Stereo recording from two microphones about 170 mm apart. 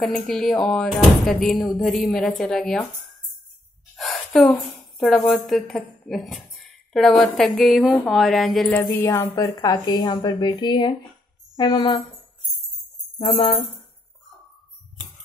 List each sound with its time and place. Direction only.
0.0 s speech: centre (ahead or behind)
3.9 s speech: 5° left (ahead or behind)
8.7 s a woman's voice: 15° left (ahead or behind)